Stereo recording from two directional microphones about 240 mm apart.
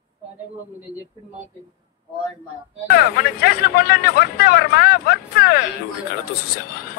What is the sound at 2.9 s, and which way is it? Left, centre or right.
Speech, left.